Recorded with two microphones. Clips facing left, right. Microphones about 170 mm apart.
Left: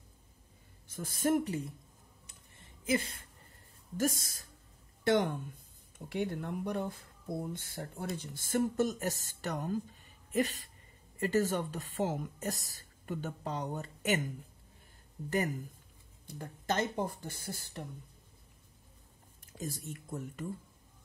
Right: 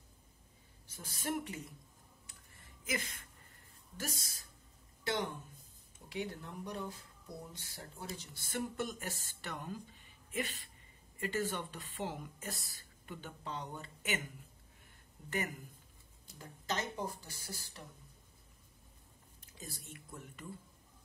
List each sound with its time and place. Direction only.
0.9 s speech: 45° left (ahead or behind)
2.2 s a sound: 25° left (ahead or behind)
3.9 s speech: 45° left (ahead or behind)
15.2 s speech: 35° left (ahead or behind)
16.3 s speech: 55° left (ahead or behind)
19.5 s speech: 45° left (ahead or behind)